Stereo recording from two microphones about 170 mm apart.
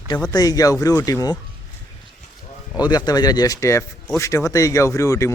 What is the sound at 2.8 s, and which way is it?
A man's voice, 25° left (ahead or behind).